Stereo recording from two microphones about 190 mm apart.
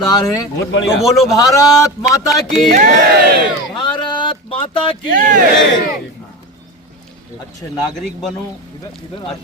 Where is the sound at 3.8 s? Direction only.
25° left (ahead or behind).